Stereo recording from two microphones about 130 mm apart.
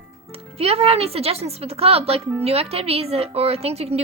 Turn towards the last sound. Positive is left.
turn(degrees=-50)  # may be behind; listen again after turning